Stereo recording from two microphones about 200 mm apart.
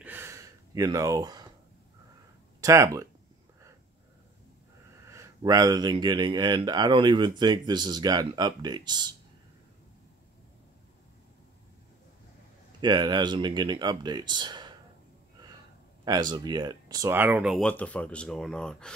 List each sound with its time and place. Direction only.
0.0 s gasp: 10° right (ahead or behind)
2.6 s speech: 15° right (ahead or behind)
5.0 s speech: 15° right (ahead or behind)
12.8 s speech: 20° right (ahead or behind)
16.0 s speech: 20° right (ahead or behind); by 18.9 s 5° left (ahead or behind)